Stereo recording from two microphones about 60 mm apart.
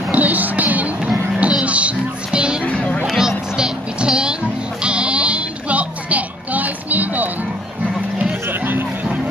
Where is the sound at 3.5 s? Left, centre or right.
Centre.